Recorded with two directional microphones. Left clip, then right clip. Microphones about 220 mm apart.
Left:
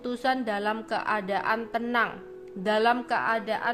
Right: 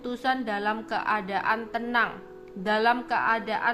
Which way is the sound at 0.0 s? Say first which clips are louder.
Even; 15° left (ahead or behind).